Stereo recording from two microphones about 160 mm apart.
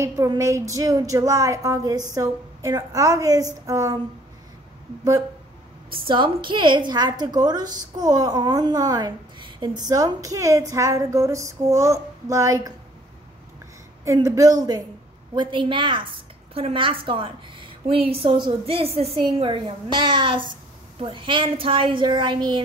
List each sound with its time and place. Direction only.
0.0 s female singing: 20° right (ahead or behind)
5.9 s female singing: 35° right (ahead or behind)
14.0 s female singing: 20° right (ahead or behind)
15.3 s a woman's voice: 30° right (ahead or behind)